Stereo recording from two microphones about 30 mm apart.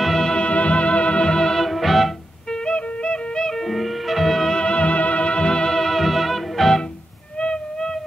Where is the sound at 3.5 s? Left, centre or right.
Centre.